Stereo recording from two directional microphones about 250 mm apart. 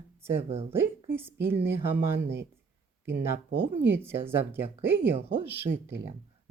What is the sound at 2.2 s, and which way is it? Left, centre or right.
Speech, right.